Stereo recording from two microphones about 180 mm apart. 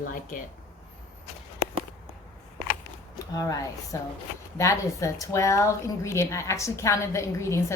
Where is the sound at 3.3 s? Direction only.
20° left (ahead or behind).